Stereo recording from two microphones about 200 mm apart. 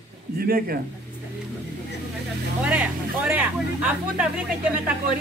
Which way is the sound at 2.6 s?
5° right (ahead or behind).